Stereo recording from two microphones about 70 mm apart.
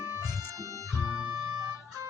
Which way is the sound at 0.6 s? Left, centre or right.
Right.